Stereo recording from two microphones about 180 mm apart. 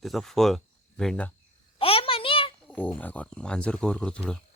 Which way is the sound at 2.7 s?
10° left (ahead or behind).